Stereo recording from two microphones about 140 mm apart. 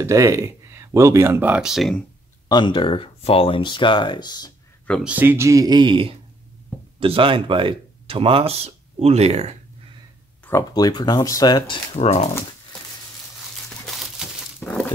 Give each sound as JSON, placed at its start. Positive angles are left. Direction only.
{"t": 0.0, "sound": "speech", "side_deg": -20}
{"t": 2.4, "sound": "speech", "side_deg": 30}
{"t": 5.0, "sound": "speech", "side_deg": -15}
{"t": 10.7, "sound": "speech", "side_deg": 30}
{"t": 11.9, "sound": "speech", "side_deg": 50}
{"t": 13.8, "sound": "a sound", "side_deg": 0}